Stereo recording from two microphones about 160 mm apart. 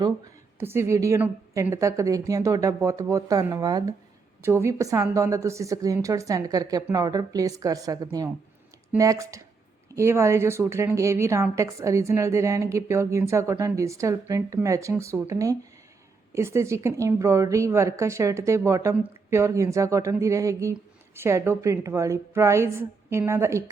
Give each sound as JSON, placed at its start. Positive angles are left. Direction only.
{"t": 0.6, "sound": "a woman's voice", "side_deg": -15}